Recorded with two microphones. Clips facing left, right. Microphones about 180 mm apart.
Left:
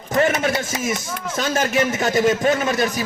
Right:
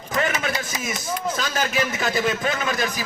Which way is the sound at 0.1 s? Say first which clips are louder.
Left 6 dB; 35° left (ahead or behind).